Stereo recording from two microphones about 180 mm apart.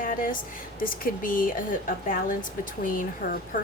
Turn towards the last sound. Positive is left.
turn(degrees=50)  # may be behind; listen again after turning